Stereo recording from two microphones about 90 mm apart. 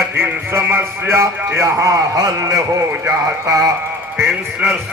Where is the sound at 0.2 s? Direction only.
25° right (ahead or behind).